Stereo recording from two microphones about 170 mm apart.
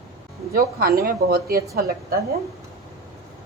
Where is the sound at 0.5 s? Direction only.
60° right (ahead or behind).